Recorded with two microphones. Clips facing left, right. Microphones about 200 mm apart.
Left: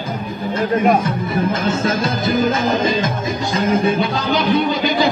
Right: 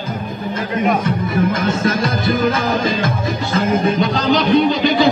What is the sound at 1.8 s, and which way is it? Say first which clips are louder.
Music: right 1 dB; 25° left (ahead or behind).